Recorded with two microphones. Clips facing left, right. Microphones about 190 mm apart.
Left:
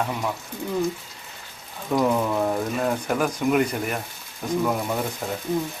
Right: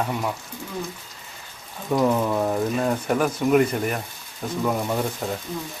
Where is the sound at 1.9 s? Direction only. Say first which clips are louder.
Right 1 dB; 5° right (ahead or behind).